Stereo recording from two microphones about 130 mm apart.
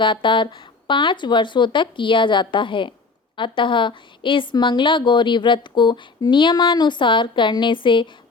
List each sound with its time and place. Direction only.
0.0 s a woman's voice: 40° left (ahead or behind)